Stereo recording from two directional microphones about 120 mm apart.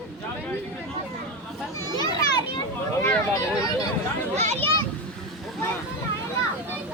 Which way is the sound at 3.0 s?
20° left (ahead or behind).